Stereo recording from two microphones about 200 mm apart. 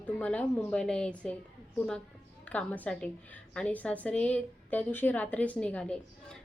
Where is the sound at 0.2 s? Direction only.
5° left (ahead or behind).